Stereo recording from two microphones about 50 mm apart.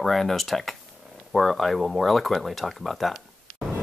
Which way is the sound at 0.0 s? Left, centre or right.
Centre.